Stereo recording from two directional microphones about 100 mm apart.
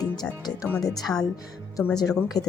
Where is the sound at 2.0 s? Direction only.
40° left (ahead or behind).